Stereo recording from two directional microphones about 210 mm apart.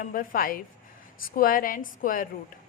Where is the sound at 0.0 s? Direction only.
40° left (ahead or behind).